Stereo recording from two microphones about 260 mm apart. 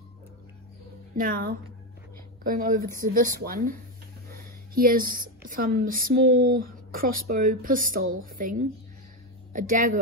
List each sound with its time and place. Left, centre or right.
1.1 s a woman's voice: right